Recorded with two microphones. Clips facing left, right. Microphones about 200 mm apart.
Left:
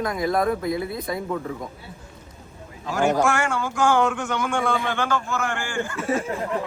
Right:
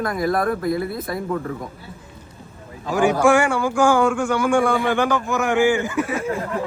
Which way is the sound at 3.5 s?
10° right (ahead or behind).